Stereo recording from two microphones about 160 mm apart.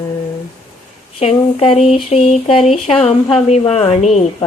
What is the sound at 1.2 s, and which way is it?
Speech, 40° left (ahead or behind).